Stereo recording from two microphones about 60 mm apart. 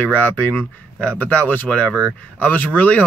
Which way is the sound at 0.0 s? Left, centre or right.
Left.